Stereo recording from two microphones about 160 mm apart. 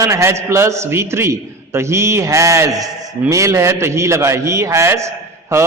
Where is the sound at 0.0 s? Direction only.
20° right (ahead or behind).